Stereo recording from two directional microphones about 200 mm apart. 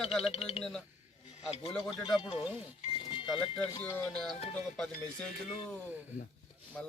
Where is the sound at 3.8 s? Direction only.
10° left (ahead or behind).